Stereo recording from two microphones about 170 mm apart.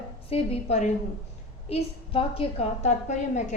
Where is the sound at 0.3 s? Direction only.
35° left (ahead or behind).